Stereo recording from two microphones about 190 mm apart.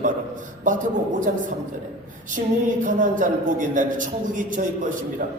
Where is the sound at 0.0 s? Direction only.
40° right (ahead or behind).